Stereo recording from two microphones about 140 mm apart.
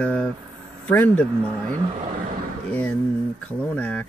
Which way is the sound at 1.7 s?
50° right (ahead or behind).